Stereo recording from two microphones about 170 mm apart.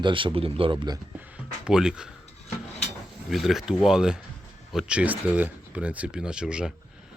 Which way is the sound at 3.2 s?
Centre (ahead or behind).